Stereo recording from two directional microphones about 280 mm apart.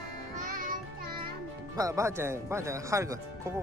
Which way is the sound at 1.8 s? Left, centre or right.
Centre.